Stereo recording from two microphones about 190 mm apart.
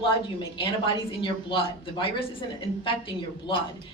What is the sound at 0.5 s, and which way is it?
Speech, 30° left (ahead or behind).